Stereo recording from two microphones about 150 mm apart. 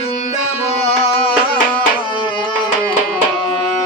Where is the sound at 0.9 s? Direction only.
40° left (ahead or behind).